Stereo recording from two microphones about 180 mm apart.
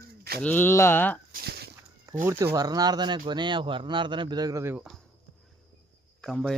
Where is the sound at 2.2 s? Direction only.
15° right (ahead or behind).